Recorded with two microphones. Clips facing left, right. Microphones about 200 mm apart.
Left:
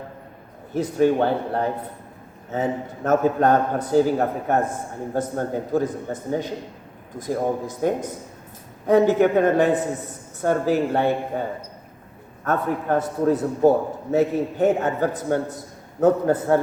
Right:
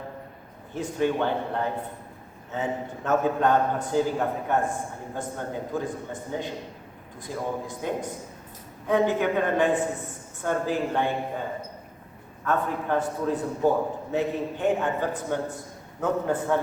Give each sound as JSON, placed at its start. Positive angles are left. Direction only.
{"t": 0.7, "sound": "a man's voice", "side_deg": 40}
{"t": 7.2, "sound": "a man's voice", "side_deg": 45}
{"t": 12.5, "sound": "a man's voice", "side_deg": 40}